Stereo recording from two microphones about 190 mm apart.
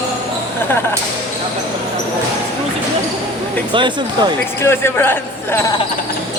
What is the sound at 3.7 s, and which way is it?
Speech, 25° right (ahead or behind).